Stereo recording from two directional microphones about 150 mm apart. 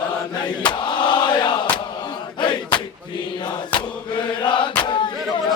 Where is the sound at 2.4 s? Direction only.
30° left (ahead or behind).